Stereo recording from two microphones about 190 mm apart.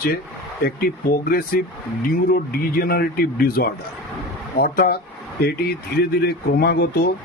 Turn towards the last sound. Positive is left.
turn(degrees=55)  # may be behind; listen again after turning